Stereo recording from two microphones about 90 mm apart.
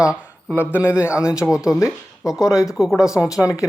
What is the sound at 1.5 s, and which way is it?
Speech, 10° right (ahead or behind).